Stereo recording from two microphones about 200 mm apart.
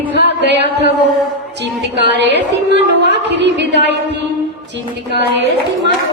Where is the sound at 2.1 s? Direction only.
60° right (ahead or behind).